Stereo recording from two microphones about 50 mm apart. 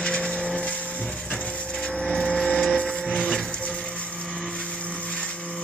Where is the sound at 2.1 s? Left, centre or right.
Centre.